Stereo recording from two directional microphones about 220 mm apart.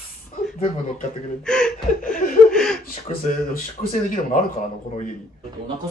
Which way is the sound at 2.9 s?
40° left (ahead or behind).